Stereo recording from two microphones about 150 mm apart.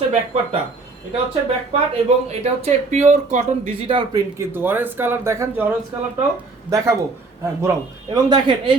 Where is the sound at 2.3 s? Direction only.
50° right (ahead or behind).